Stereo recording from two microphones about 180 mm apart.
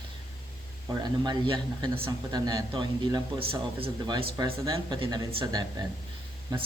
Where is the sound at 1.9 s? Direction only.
15° right (ahead or behind).